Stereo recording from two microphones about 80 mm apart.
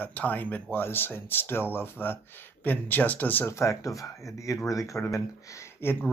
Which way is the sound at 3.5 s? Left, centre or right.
Left.